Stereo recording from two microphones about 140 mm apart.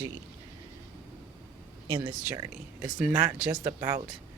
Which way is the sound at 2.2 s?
25° right (ahead or behind).